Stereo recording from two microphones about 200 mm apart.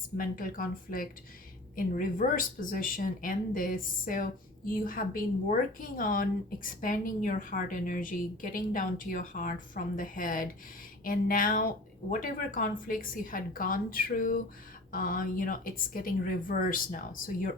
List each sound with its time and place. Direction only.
0.2 s speech: 45° left (ahead or behind)